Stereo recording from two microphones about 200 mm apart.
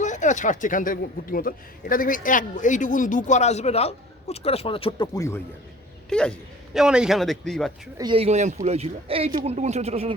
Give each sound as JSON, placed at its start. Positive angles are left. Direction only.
{"t": 0.0, "sound": "a woman's voice", "side_deg": 35}
{"t": 6.1, "sound": "speech", "side_deg": 5}
{"t": 7.9, "sound": "a man's voice", "side_deg": -25}